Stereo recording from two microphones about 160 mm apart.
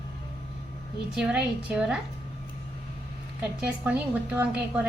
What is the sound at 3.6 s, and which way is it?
A woman's voice, 10° right (ahead or behind).